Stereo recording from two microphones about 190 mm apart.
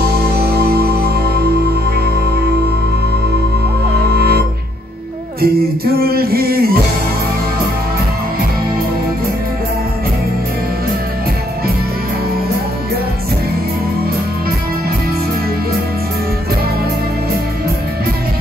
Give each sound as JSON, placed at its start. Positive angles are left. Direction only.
{"t": 4.1, "sound": "music", "side_deg": -55}
{"t": 5.4, "sound": "music", "side_deg": -55}